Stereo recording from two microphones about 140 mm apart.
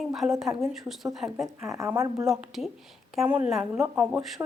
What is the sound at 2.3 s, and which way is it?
Speech, centre (ahead or behind).